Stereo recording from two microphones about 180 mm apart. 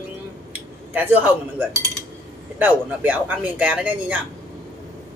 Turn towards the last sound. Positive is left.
turn(degrees=-10)  # may be behind; listen again after turning